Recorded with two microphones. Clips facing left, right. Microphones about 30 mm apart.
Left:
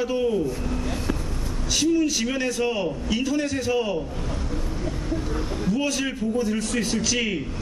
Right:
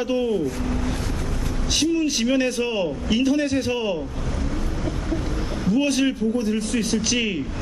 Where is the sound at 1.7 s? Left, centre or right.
Right.